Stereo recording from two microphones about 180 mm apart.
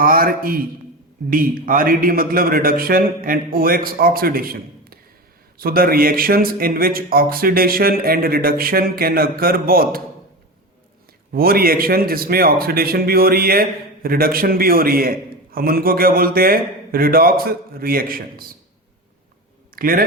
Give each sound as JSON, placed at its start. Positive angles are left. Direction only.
{"t": 0.0, "sound": "a man's voice", "side_deg": -50}
{"t": 11.3, "sound": "a man's voice", "side_deg": -55}
{"t": 19.7, "sound": "speech", "side_deg": -50}